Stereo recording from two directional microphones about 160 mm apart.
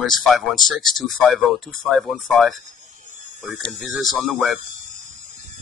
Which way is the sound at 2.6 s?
50° right (ahead or behind).